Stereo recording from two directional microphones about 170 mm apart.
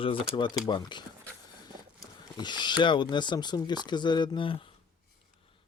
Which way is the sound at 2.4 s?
25° left (ahead or behind).